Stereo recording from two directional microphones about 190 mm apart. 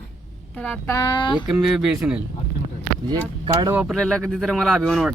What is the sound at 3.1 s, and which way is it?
Speech, 20° right (ahead or behind).